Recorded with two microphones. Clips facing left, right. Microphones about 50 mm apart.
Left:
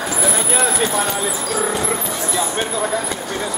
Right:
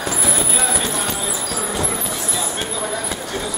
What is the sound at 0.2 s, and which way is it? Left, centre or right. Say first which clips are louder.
Clip-clop: left 3 dB; centre.